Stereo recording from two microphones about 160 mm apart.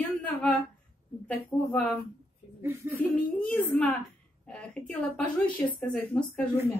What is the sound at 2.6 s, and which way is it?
Speech, 15° right (ahead or behind).